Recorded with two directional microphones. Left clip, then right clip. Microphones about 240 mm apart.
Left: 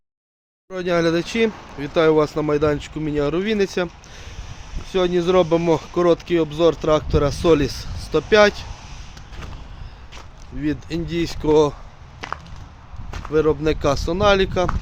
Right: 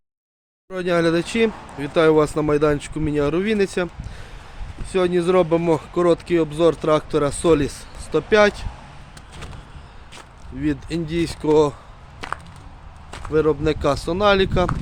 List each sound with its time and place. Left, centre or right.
0.7 s speech: centre
10.1 s speech: centre
12.2 s a sound: centre
13.1 s speech: centre